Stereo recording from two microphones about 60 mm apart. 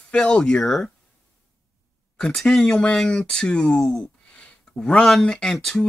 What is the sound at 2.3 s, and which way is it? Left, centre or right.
Speech, centre.